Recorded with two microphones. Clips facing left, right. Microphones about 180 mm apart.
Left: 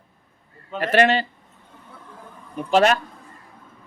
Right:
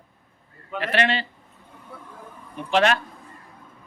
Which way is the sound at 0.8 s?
45° left (ahead or behind).